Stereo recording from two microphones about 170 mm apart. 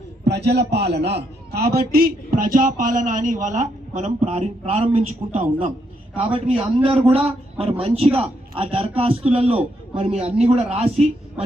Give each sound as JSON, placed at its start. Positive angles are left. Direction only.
{"t": 0.3, "sound": "a man's voice", "side_deg": -80}